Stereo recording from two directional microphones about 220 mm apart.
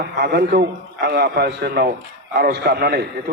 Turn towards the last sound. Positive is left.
turn(degrees=-45)  # may be behind; listen again after turning